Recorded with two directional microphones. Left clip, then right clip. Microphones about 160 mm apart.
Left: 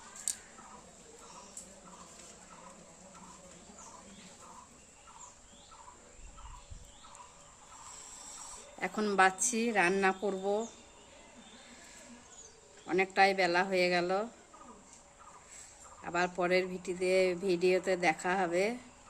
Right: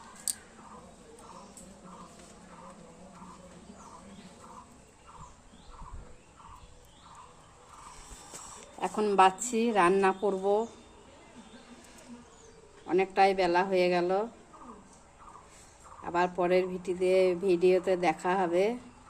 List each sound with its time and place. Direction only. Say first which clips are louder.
8.8 s speech: right 4 dB; 20° left (ahead or behind)
12.9 s speech: right 3 dB; 20° left (ahead or behind)
16.0 s speech: right 4 dB; 15° left (ahead or behind)